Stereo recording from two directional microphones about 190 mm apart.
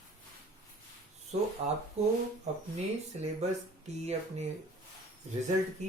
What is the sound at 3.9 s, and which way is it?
Speech, 35° right (ahead or behind).